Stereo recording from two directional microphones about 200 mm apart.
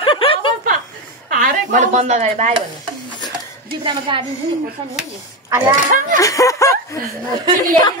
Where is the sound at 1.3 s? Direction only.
45° right (ahead or behind).